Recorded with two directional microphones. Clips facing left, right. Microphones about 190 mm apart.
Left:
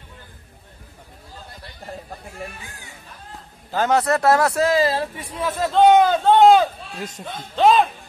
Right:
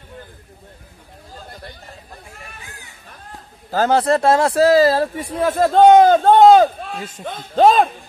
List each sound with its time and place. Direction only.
3.7 s speech: 30° right (ahead or behind)
7.2 s speech: centre (ahead or behind)
7.5 s speech: 45° right (ahead or behind)